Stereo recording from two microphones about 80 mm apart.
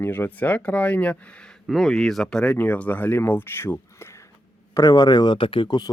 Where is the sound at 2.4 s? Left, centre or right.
Centre.